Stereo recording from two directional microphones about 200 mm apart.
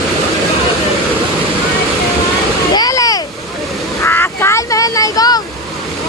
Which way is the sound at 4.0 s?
10° left (ahead or behind).